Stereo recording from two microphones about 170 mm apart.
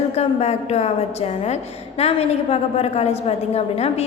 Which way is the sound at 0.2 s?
40° left (ahead or behind).